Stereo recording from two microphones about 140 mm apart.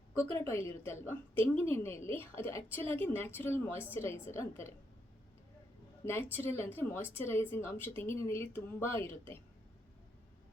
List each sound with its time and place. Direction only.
0.2 s a woman's voice: 20° left (ahead or behind)
6.0 s a woman's voice: 15° left (ahead or behind)